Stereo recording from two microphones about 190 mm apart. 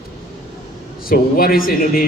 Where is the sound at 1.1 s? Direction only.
50° left (ahead or behind).